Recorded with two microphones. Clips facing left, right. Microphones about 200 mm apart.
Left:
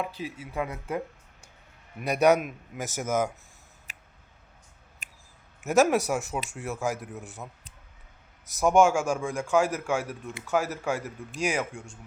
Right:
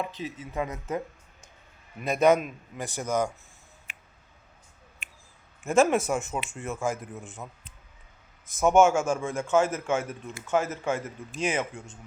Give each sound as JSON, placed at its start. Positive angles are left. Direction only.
{"t": 0.0, "sound": "a man's voice", "side_deg": 10}
{"t": 3.9, "sound": "a sound", "side_deg": 40}
{"t": 5.5, "sound": "a man's voice", "side_deg": 0}
{"t": 8.5, "sound": "a man's voice", "side_deg": 0}